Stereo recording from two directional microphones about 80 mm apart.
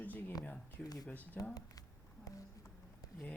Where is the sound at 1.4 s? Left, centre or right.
Centre.